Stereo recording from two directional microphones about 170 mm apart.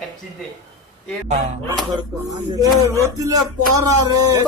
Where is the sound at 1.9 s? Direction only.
25° right (ahead or behind).